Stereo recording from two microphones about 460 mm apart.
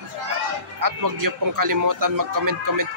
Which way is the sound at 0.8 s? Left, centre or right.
Right.